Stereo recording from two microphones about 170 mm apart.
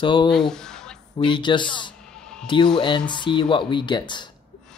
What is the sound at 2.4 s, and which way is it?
Speech, 30° left (ahead or behind).